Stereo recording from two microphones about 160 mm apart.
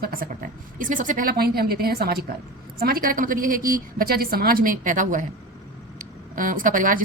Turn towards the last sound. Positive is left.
turn(degrees=-55)  # may be behind; listen again after turning